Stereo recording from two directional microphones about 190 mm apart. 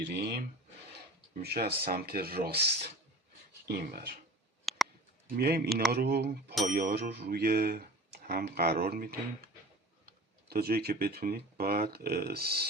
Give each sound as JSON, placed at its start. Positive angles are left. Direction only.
{"t": 0.0, "sound": "speech", "side_deg": -60}
{"t": 3.7, "sound": "speech", "side_deg": -55}
{"t": 4.7, "sound": "a sound", "side_deg": 0}
{"t": 5.4, "sound": "speech", "side_deg": -55}